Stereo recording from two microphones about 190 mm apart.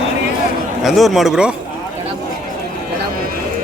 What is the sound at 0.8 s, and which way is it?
Speech, centre (ahead or behind).